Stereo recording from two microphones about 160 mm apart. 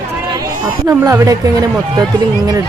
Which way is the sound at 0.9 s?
20° right (ahead or behind).